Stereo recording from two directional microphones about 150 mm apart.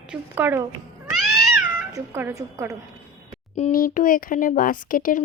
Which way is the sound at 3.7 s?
65° left (ahead or behind).